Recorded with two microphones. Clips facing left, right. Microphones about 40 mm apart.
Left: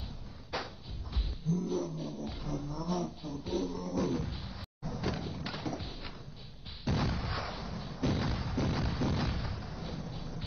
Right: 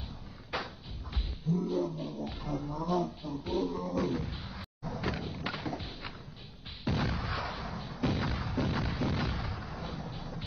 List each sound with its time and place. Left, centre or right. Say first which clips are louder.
0.5 s a sound: right 1 dB; right
1.8 s speech: right 3 dB; right
4.5 s door: right 1 dB; right
5.1 s thump: right 2 dB; right
7.0 s artillery fire: right 1 dB; right
7.3 s artillery fire: right 2 dB; right
7.9 s thump: even; right
8.6 s a sound: left 1 dB; right